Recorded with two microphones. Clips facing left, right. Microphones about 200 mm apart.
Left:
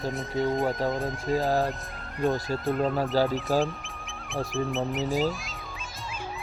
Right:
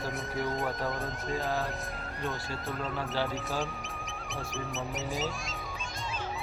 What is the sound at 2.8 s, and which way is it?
Speech, 40° left (ahead or behind).